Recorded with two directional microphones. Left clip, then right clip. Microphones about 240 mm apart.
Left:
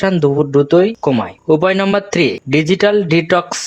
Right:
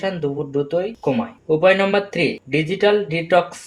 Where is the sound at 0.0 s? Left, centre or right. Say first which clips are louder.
Left 9 dB; left.